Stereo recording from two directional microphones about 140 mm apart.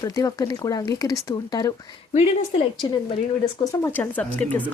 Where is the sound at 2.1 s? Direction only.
50° left (ahead or behind).